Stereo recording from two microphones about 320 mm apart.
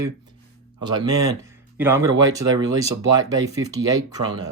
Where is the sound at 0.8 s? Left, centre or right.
Centre.